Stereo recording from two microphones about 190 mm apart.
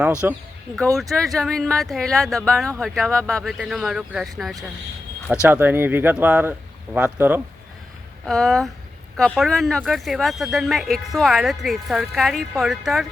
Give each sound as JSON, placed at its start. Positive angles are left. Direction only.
{"t": 0.2, "sound": "speech", "side_deg": -10}
{"t": 8.2, "sound": "speech", "side_deg": 0}